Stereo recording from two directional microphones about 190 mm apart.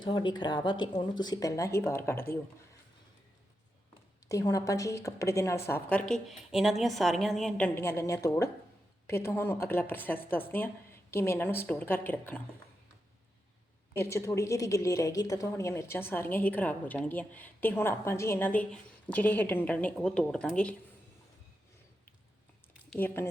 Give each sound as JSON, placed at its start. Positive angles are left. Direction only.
{"t": 0.0, "sound": "speech", "side_deg": 25}
{"t": 4.3, "sound": "a woman's voice", "side_deg": 15}
{"t": 13.9, "sound": "a woman's voice", "side_deg": 15}
{"t": 22.9, "sound": "speech", "side_deg": 10}